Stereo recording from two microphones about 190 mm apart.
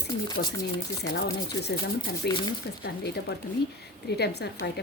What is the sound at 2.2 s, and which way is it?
Speech, 60° left (ahead or behind).